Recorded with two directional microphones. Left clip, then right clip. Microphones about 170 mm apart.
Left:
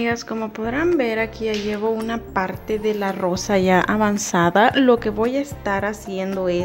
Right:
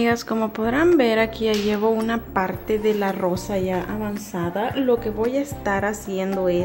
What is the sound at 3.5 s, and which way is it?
A woman's voice, 45° left (ahead or behind).